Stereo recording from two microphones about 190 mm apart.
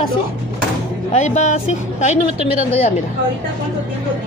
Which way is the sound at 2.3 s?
35° right (ahead or behind).